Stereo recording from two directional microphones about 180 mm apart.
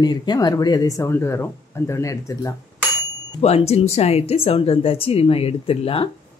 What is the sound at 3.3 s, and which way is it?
Speech, 35° left (ahead or behind).